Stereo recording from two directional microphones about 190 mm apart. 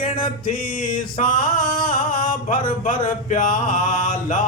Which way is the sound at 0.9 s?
45° left (ahead or behind).